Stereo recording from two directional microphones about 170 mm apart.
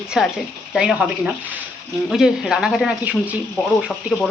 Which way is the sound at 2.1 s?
Centre (ahead or behind).